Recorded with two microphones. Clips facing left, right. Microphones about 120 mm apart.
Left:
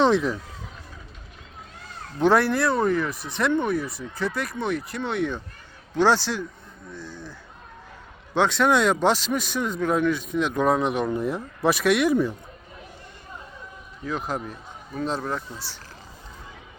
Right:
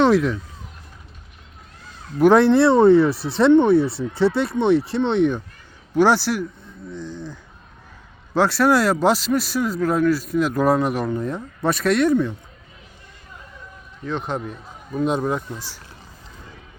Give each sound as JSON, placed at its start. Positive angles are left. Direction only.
{"t": 0.0, "sound": "speech", "side_deg": 0}
{"t": 2.1, "sound": "speech", "side_deg": -10}
{"t": 2.4, "sound": "speech", "side_deg": -25}
{"t": 8.4, "sound": "speech", "side_deg": -5}
{"t": 14.0, "sound": "speech", "side_deg": 5}
{"t": 15.0, "sound": "speech", "side_deg": -15}